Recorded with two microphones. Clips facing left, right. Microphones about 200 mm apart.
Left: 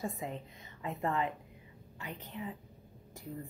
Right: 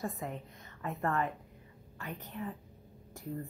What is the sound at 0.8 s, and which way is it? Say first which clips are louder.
Speech: right 1 dB; 10° left (ahead or behind).